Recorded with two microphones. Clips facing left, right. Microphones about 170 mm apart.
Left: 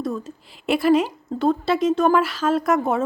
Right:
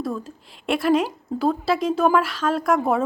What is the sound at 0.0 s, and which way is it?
A woman's voice, centre (ahead or behind).